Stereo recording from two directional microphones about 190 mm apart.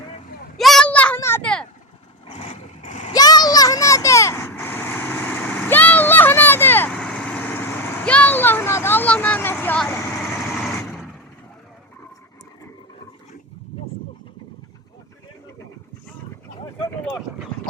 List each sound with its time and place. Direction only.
0.5 s a sound: centre (ahead or behind)
2.2 s vehicle: 30° left (ahead or behind)
3.1 s vehicle: 20° left (ahead or behind); by 11.0 s centre (ahead or behind)